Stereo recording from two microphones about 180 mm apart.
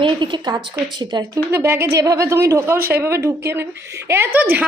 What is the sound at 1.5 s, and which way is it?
Speech, 15° right (ahead or behind).